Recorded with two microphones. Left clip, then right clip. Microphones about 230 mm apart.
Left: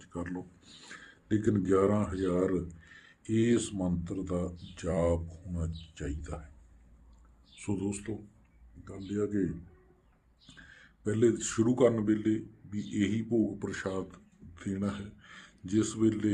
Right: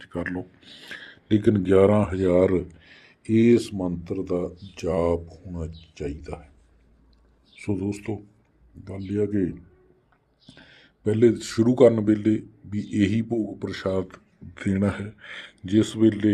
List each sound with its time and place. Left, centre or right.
0.0 s speech: right
7.5 s speech: centre
9.0 s speech: right
10.7 s speech: right
13.6 s speech: centre